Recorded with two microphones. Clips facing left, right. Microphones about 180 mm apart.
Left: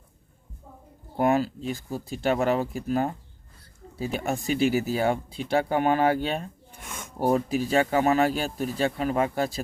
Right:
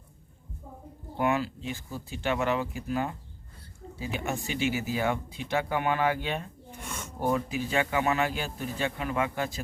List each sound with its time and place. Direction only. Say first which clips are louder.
1.1 s speech: left 5 dB; 40° left (ahead or behind)
6.8 s a sound: even; centre (ahead or behind)
7.2 s speech: left 5 dB; 35° left (ahead or behind)